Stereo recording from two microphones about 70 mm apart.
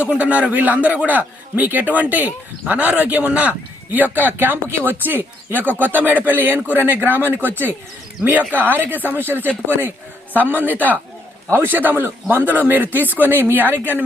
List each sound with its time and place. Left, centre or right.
0.2 s a man's voice: centre